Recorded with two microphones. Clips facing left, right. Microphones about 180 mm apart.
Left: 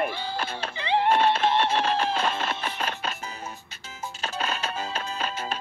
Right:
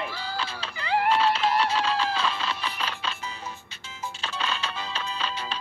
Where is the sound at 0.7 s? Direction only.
25° left (ahead or behind).